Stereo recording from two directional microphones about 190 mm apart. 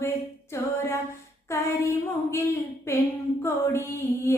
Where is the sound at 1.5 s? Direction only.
15° left (ahead or behind).